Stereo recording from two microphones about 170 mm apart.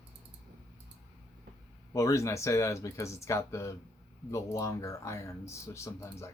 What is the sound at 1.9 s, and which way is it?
Speech, 20° left (ahead or behind).